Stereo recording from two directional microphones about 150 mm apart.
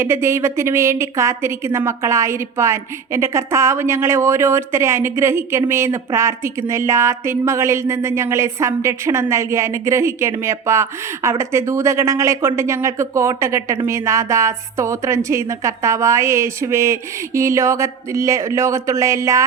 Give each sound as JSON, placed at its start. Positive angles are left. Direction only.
{"t": 0.0, "sound": "a woman's voice", "side_deg": -20}